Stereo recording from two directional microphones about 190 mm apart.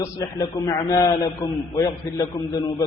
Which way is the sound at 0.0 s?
15° left (ahead or behind).